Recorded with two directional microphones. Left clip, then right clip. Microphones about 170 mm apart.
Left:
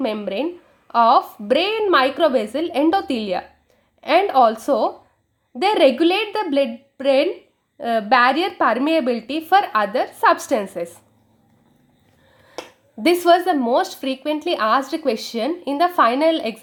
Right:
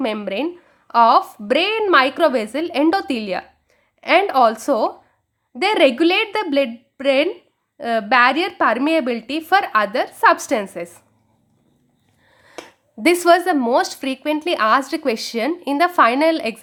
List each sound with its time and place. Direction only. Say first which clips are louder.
0.0 s a woman's voice: right 1 dB; 25° right (ahead or behind)
13.1 s a woman's voice: right 1 dB; 25° right (ahead or behind)